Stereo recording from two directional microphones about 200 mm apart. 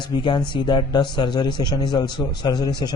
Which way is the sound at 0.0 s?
20° left (ahead or behind).